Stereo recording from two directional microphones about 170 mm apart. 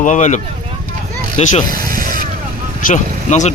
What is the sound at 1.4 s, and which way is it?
Speech, 45° left (ahead or behind).